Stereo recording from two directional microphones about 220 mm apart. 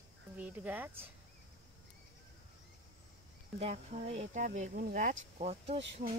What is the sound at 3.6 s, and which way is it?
Speech, 30° right (ahead or behind).